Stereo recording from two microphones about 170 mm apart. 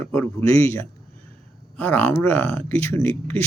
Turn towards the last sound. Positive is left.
turn(degrees=10)  # may be behind; listen again after turning